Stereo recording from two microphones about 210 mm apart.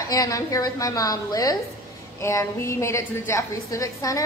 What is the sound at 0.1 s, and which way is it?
A woman's voice, 15° left (ahead or behind).